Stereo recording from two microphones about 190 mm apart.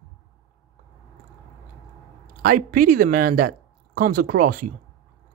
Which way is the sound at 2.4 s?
45° right (ahead or behind).